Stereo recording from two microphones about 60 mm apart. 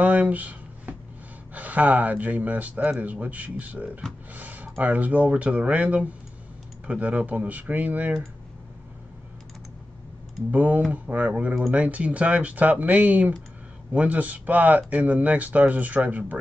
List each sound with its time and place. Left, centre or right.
0.0 s a sound: right
1.5 s speech: right
10.5 s speech: right